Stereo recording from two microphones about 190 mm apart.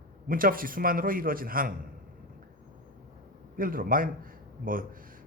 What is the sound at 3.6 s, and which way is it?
A man's voice, 50° right (ahead or behind).